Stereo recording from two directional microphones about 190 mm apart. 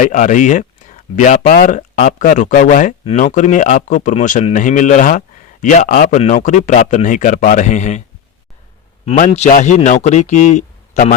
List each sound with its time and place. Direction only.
0.0 s speech: 40° left (ahead or behind)
9.0 s speech: 35° left (ahead or behind)